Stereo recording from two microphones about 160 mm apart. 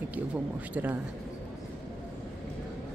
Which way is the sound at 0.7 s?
10° right (ahead or behind).